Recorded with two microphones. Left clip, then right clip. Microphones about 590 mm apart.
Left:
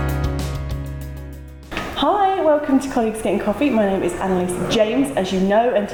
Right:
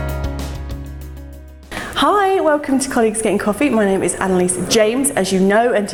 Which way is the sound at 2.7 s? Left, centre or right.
Right.